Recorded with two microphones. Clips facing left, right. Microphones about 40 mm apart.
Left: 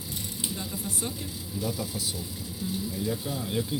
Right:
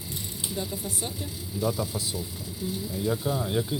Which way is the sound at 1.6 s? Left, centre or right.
Right.